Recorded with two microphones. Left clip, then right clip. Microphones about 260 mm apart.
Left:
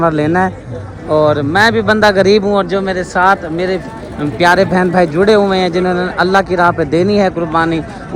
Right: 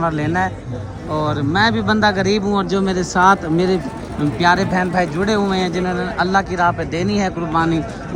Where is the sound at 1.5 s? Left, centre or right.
Centre.